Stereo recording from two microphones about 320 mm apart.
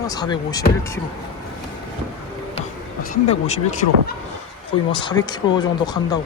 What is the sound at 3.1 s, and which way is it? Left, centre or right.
Speech, left.